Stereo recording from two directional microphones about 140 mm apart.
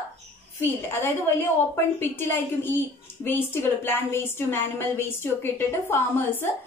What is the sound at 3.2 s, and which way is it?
A woman's voice, 15° left (ahead or behind).